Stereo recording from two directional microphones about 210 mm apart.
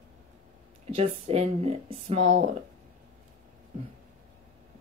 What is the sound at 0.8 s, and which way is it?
Speech, 30° right (ahead or behind).